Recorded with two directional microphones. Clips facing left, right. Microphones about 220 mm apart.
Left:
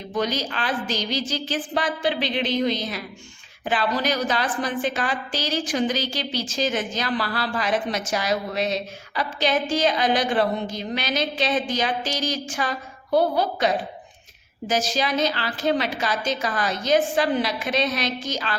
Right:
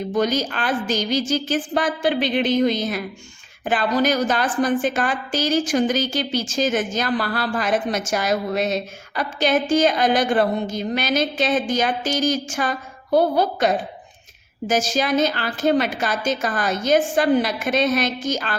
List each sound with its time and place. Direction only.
0.1 s a woman's voice: 45° right (ahead or behind)